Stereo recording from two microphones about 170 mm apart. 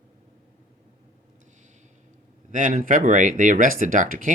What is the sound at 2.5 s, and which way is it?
Speech, 50° right (ahead or behind).